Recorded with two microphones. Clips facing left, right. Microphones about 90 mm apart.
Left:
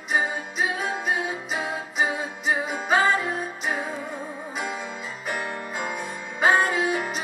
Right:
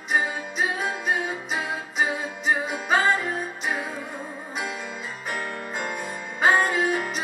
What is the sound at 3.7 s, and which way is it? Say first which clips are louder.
Music: left 1 dB; 35° left (ahead or behind).